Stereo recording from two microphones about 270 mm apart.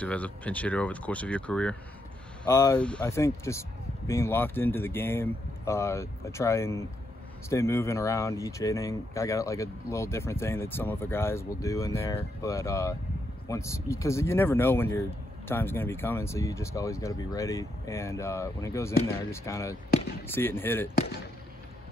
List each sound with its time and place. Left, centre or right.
0.0 s speech: centre